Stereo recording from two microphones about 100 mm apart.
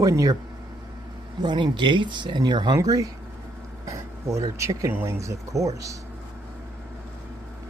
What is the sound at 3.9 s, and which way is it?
Speech, 30° right (ahead or behind).